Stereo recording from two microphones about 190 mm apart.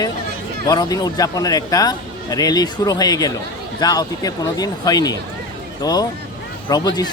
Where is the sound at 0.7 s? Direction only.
20° left (ahead or behind).